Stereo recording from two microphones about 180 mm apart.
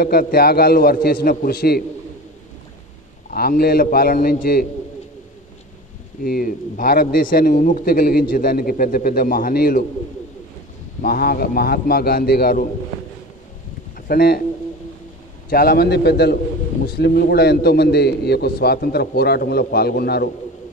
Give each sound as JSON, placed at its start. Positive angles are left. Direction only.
{"t": 0.0, "sound": "a man's voice", "side_deg": 60}
{"t": 3.3, "sound": "a man's voice", "side_deg": 55}
{"t": 6.2, "sound": "a man's voice", "side_deg": 55}
{"t": 11.0, "sound": "a man's voice", "side_deg": 55}
{"t": 13.9, "sound": "a man's voice", "side_deg": 55}
{"t": 15.5, "sound": "a man's voice", "side_deg": 60}